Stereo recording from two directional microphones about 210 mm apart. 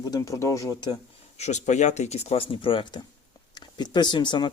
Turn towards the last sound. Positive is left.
turn(degrees=20)  # may be behind; listen again after turning